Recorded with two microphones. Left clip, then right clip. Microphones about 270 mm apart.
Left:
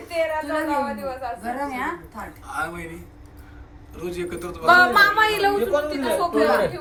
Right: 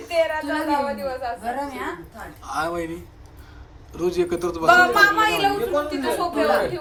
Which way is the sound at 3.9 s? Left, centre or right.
Centre.